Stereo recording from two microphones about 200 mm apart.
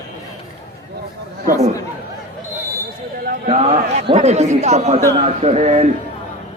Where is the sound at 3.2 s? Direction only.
45° right (ahead or behind).